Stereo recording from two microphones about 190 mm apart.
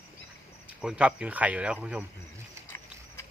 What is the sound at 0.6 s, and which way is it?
Speech, 5° right (ahead or behind).